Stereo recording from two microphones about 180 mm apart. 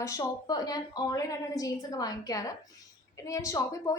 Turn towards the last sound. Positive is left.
turn(degrees=20)  # may be behind; listen again after turning